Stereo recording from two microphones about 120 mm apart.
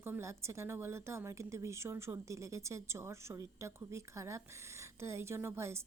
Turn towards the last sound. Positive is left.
turn(degrees=-20)  # may be behind; listen again after turning